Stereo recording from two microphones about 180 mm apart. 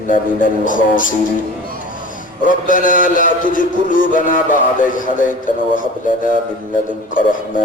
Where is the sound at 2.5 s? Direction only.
50° left (ahead or behind).